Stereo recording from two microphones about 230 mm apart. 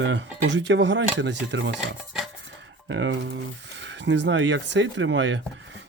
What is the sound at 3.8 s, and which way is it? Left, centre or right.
Speech, right.